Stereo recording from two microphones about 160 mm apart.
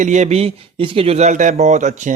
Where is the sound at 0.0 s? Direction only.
50° right (ahead or behind).